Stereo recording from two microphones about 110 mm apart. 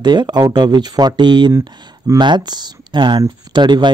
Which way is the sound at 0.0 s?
40° right (ahead or behind).